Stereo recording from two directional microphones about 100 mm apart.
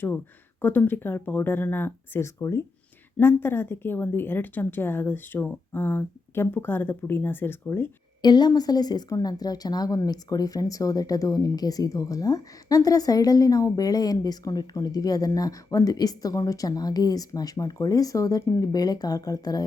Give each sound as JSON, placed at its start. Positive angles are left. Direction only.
{"t": 0.6, "sound": "a woman's voice", "side_deg": 20}
{"t": 8.2, "sound": "a woman's voice", "side_deg": 45}